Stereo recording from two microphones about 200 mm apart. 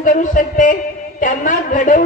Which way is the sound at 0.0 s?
40° left (ahead or behind).